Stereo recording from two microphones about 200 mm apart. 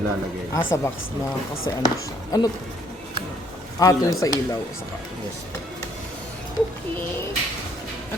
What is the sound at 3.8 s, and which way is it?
Speech, 15° left (ahead or behind).